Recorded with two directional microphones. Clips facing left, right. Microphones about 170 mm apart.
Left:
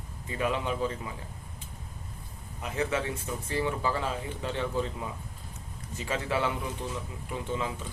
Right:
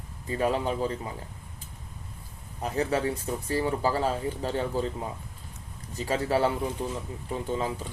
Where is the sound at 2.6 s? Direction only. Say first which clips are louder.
Right 4 dB; 35° right (ahead or behind).